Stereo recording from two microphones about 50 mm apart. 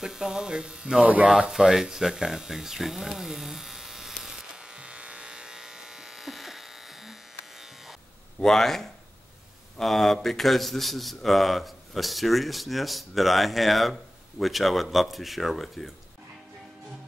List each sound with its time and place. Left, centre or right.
0.0 s speech: centre
1.0 s speech: right
1.5 s speech: centre
4.2 s electric shaver: centre
8.4 s a man's voice: centre